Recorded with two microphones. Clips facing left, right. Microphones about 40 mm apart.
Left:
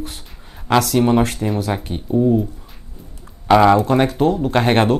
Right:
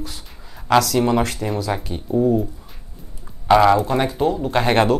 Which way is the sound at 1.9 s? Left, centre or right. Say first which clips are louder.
Left 2 dB; left.